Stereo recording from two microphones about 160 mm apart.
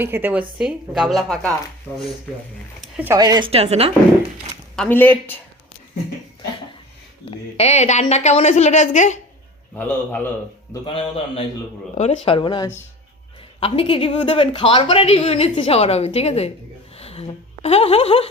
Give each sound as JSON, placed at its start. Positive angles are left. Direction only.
{"t": 0.0, "sound": "a woman's voice", "side_deg": -10}
{"t": 0.6, "sound": "speech", "side_deg": 0}
{"t": 3.2, "sound": "a woman's voice", "side_deg": -25}
{"t": 3.5, "sound": "speech", "side_deg": -40}
{"t": 4.8, "sound": "speech", "side_deg": 10}
{"t": 7.3, "sound": "a woman's voice", "side_deg": 40}
{"t": 9.7, "sound": "speech", "side_deg": 10}
{"t": 11.9, "sound": "speech", "side_deg": 40}